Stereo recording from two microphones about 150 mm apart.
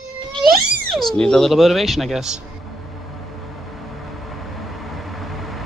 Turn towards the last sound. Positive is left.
turn(degrees=0)  # may be behind; listen again after turning